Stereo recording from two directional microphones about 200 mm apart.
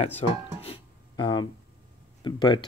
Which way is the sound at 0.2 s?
30° left (ahead or behind).